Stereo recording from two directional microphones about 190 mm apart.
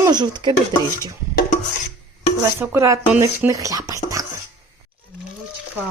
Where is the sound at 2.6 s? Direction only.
15° right (ahead or behind).